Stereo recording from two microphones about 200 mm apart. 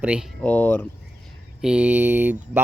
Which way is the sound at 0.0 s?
5° right (ahead or behind).